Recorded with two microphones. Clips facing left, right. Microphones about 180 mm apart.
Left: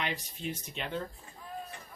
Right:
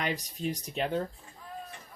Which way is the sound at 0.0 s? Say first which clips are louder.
Right 4 dB; 45° right (ahead or behind).